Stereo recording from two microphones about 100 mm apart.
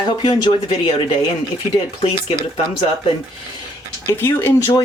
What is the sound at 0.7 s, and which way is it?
Speech, 65° left (ahead or behind).